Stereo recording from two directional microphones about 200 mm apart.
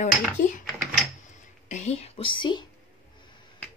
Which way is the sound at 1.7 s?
35° left (ahead or behind).